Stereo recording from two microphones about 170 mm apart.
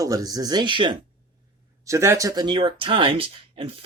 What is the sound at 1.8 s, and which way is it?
Speech, 15° right (ahead or behind).